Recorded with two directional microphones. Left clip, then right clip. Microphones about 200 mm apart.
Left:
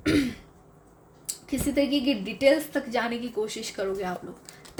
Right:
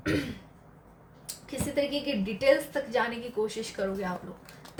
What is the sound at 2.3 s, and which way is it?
A woman's voice, 45° left (ahead or behind).